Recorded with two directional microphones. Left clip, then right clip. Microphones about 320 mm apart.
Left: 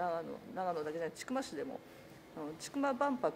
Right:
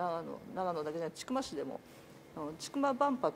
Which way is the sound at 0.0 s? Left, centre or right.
Right.